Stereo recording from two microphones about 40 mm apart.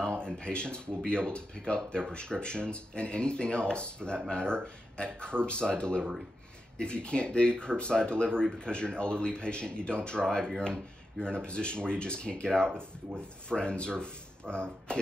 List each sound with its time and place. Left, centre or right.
0.0 s speech: centre